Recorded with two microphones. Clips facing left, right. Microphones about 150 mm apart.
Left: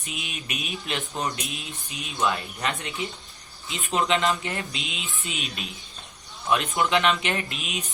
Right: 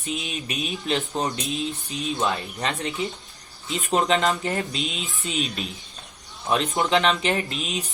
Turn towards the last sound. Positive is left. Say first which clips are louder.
# right 4 dB
turn(degrees=-35)  # may be behind; listen again after turning